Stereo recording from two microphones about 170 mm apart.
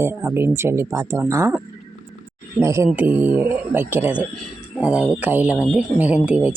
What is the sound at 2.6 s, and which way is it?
Speech, 15° right (ahead or behind).